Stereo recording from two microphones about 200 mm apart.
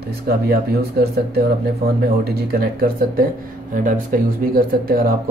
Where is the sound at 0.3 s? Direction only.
50° right (ahead or behind).